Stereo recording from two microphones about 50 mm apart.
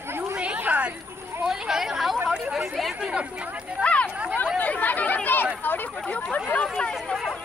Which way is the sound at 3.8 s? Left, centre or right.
Left.